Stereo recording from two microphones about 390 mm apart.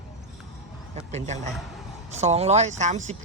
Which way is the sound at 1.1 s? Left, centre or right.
Centre.